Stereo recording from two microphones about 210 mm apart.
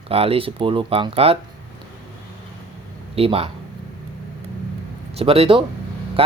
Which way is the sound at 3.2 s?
30° right (ahead or behind).